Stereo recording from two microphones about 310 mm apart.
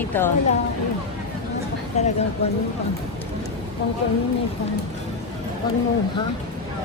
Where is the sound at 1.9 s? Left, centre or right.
Left.